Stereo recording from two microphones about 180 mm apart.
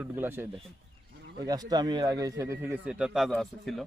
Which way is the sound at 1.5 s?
20° right (ahead or behind).